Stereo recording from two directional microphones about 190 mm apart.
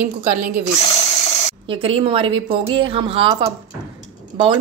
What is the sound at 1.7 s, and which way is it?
A woman's voice, 30° right (ahead or behind).